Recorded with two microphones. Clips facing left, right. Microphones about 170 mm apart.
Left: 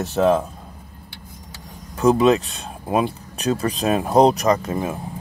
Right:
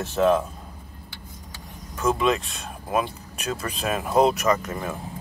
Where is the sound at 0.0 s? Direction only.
35° left (ahead or behind).